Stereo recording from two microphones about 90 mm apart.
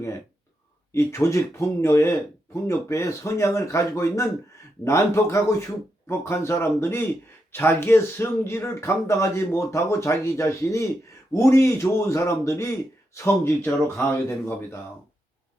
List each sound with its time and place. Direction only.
0.9 s speech: 30° left (ahead or behind)